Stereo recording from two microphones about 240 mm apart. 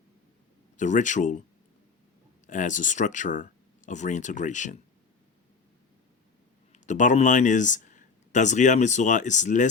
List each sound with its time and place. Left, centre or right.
0.8 s speech: left
2.5 s speech: left
6.7 s speech: left